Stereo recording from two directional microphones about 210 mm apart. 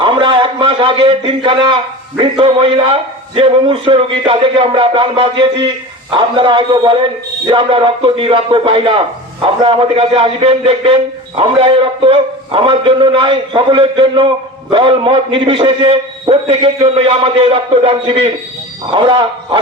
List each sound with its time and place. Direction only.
0.0 s a man's voice: 20° right (ahead or behind)